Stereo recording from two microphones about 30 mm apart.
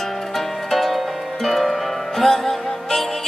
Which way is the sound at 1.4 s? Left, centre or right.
Centre.